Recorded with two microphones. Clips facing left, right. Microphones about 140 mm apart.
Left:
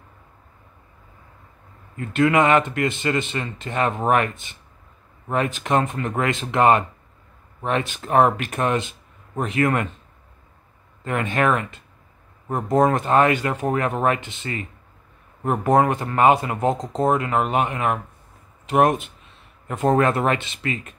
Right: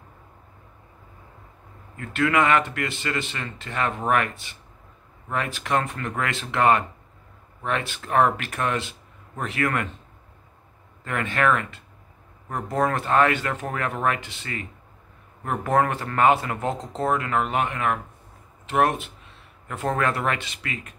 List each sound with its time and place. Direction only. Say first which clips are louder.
2.0 s speech: left 4 dB; 20° left (ahead or behind)
11.1 s speech: left 2 dB; 20° left (ahead or behind)